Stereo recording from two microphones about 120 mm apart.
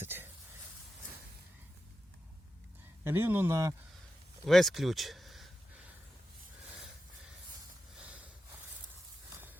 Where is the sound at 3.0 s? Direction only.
20° right (ahead or behind).